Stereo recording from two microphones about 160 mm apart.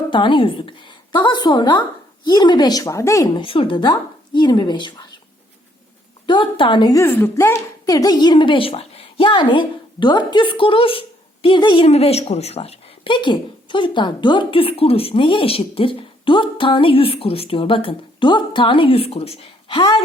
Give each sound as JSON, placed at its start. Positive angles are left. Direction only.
{"t": 0.1, "sound": "a woman's voice", "side_deg": 30}
{"t": 3.4, "sound": "a woman's voice", "side_deg": 35}
{"t": 6.2, "sound": "a woman's voice", "side_deg": 30}
{"t": 7.0, "sound": "a woman's voice", "side_deg": 15}